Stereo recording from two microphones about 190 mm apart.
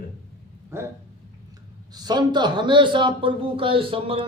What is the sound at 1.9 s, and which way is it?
A man's voice, 20° right (ahead or behind).